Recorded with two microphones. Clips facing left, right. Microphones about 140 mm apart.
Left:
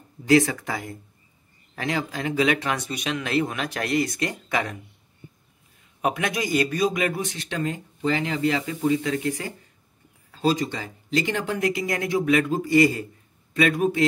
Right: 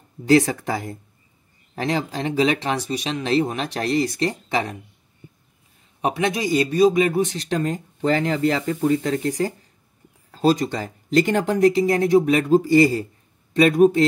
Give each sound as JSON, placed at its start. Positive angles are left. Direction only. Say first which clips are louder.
{"t": 0.3, "sound": "speech", "louder": "right 2 dB", "side_deg": -35}
{"t": 5.9, "sound": "speech", "louder": "right 3 dB", "side_deg": -25}